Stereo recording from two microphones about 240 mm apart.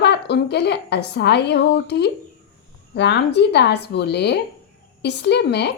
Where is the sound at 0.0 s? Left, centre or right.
Left.